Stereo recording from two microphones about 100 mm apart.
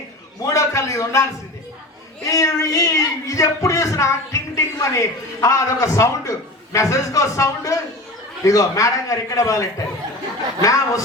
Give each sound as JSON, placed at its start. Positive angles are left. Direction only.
{"t": 0.4, "sound": "speech", "side_deg": 30}